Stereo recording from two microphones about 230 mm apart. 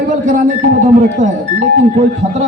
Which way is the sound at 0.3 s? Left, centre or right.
Right.